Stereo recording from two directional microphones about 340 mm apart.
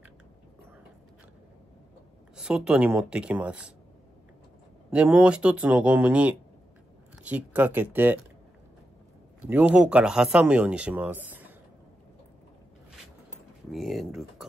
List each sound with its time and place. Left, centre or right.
2.3 s speech: centre
4.9 s speech: centre
9.4 s speech: centre
13.7 s speech: centre